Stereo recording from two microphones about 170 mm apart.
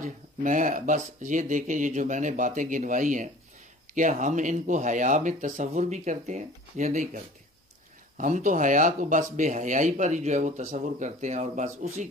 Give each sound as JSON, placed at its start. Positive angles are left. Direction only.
{"t": 0.0, "sound": "speech", "side_deg": -50}
{"t": 8.2, "sound": "speech", "side_deg": -50}